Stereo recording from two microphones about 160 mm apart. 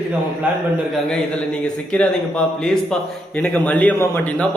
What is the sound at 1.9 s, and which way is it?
A man's voice, 5° left (ahead or behind).